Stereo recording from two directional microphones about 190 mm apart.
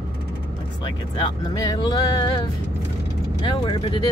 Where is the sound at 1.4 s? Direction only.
20° left (ahead or behind).